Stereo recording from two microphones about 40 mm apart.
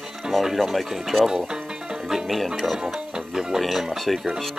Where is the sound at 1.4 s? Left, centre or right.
Centre.